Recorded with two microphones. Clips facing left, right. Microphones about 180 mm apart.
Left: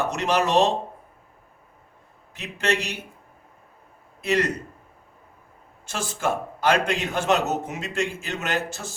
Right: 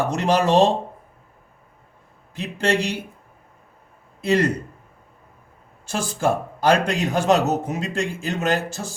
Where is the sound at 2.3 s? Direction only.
30° right (ahead or behind).